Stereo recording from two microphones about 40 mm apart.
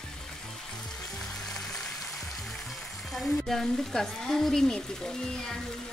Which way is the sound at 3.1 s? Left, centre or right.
Centre.